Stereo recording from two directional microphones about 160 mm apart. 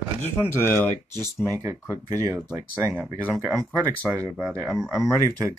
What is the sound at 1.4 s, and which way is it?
Speech, 20° right (ahead or behind).